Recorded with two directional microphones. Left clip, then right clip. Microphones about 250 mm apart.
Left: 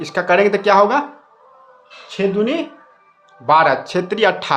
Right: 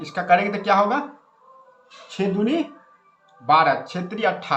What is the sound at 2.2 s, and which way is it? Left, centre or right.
Speech, left.